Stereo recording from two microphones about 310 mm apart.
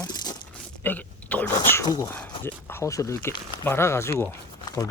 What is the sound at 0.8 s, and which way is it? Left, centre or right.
Speech, centre.